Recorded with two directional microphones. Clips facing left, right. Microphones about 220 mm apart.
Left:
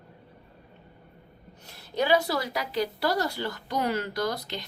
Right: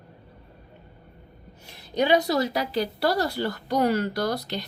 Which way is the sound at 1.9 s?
20° right (ahead or behind).